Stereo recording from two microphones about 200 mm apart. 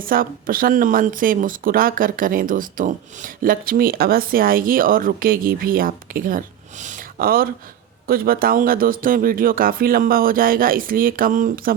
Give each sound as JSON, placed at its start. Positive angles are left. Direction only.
{"t": 0.0, "sound": "speech", "side_deg": -45}